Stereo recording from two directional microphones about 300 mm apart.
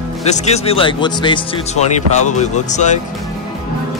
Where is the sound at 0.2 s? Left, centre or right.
Left.